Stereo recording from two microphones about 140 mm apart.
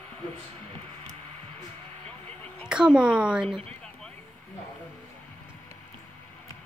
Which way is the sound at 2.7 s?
5° right (ahead or behind).